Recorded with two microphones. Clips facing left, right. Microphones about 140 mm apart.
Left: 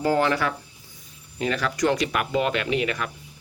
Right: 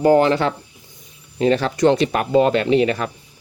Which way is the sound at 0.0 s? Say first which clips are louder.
Right 7 dB; 25° right (ahead or behind).